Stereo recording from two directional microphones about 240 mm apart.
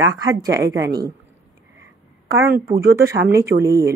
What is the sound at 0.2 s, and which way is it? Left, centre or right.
Speech, centre.